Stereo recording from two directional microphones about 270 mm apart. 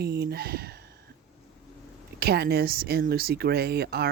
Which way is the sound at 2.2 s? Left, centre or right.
Right.